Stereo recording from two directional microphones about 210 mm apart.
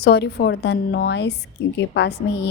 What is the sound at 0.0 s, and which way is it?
A woman's voice, 50° left (ahead or behind).